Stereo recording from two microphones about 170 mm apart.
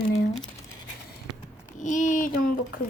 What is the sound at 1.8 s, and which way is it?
Speech, 50° left (ahead or behind).